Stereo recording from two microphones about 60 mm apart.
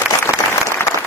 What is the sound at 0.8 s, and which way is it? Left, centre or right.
Applause, left.